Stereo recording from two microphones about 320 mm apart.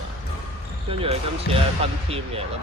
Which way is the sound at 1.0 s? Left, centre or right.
Centre.